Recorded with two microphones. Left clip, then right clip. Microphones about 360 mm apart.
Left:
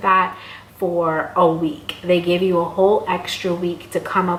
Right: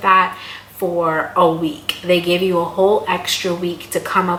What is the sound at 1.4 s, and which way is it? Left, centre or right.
Speech, left.